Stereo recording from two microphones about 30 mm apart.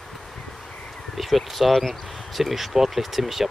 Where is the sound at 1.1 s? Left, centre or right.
Centre.